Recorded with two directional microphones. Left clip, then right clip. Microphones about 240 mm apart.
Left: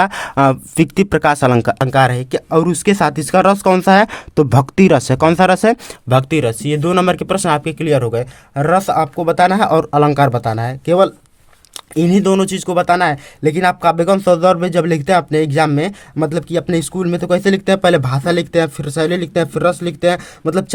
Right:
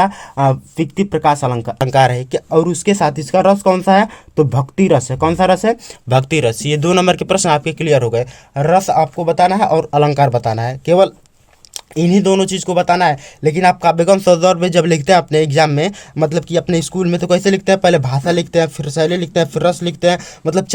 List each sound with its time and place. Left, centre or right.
0.0 s speech: left
1.8 s speech: centre; by 5.7 s left
6.1 s speech: centre